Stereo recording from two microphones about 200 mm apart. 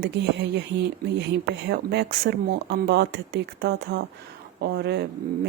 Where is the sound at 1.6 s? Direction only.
55° right (ahead or behind).